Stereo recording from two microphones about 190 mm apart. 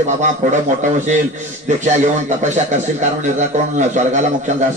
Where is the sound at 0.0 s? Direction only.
40° right (ahead or behind).